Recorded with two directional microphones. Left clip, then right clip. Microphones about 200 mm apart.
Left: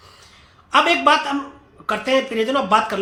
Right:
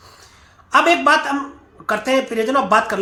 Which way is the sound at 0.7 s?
20° right (ahead or behind).